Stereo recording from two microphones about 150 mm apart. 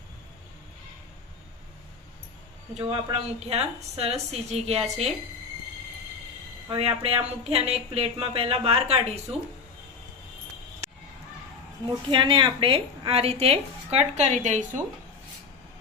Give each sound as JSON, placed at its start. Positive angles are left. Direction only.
{"t": 2.8, "sound": "speech", "side_deg": -40}
{"t": 6.7, "sound": "a woman's voice", "side_deg": -40}
{"t": 12.1, "sound": "a woman's voice", "side_deg": -35}